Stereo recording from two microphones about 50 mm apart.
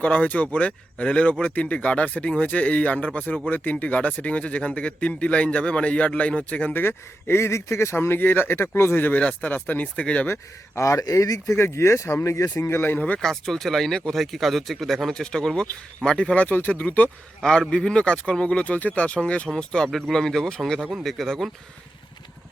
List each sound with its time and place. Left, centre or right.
0.0 s speech: left
6.7 s speech: left
9.9 s speech: left
10.8 s speech: left
12.6 s speech: left
13.2 s speech: centre; by 17.1 s left
17.7 s speech: centre
19.5 s speech: centre